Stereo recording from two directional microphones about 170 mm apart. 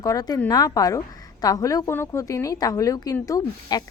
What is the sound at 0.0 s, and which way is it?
A woman's voice, 20° left (ahead or behind).